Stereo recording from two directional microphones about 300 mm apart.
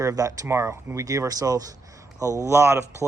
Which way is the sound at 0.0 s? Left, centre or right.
Centre.